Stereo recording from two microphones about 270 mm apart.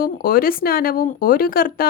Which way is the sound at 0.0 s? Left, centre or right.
Left.